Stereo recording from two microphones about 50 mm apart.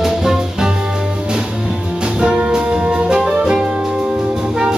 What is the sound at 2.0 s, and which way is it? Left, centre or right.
Music, centre.